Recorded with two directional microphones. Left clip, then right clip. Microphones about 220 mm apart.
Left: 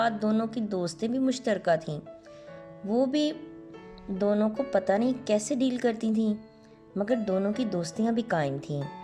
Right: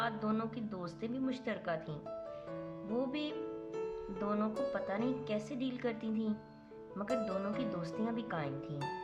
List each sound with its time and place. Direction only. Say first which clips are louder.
0.0 s speech: left 10 dB; 25° left (ahead or behind)